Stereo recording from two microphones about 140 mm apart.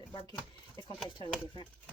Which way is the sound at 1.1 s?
35° left (ahead or behind).